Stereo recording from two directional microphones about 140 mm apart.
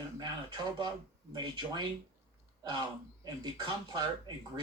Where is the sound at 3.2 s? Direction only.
30° right (ahead or behind).